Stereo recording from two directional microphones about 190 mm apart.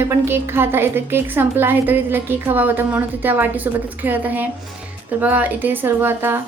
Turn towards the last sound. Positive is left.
turn(degrees=-10)  # may be behind; listen again after turning